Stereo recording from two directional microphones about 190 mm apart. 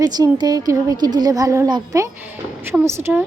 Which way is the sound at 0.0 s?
20° right (ahead or behind).